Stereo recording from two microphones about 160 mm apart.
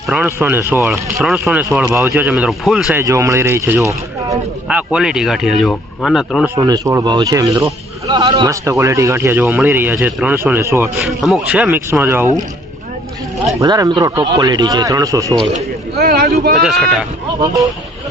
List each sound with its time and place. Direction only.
0.3 s speech: 15° right (ahead or behind)
0.9 s speech: centre (ahead or behind)
2.0 s speech: 10° right (ahead or behind)
3.0 s speech: 20° right (ahead or behind)
4.7 s speech: 5° right (ahead or behind)
6.6 s speech: 20° right (ahead or behind)
11.0 s speech: centre (ahead or behind)
13.6 s speech: 20° right (ahead or behind)
16.0 s speech: 75° right (ahead or behind)
16.6 s speech: centre (ahead or behind)